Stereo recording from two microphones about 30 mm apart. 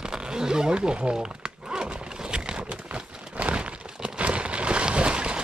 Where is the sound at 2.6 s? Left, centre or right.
Right.